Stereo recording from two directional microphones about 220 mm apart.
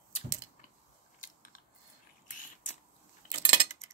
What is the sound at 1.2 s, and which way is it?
Biting, 40° left (ahead or behind).